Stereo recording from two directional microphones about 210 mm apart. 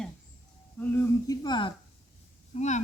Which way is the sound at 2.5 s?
35° left (ahead or behind).